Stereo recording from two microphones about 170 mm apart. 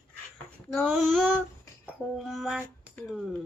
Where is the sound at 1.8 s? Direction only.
5° right (ahead or behind).